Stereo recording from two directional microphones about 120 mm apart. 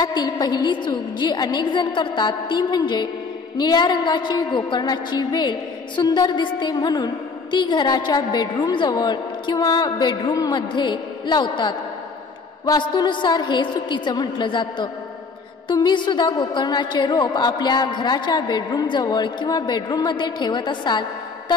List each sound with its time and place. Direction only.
0.0 s a woman's voice: 35° left (ahead or behind)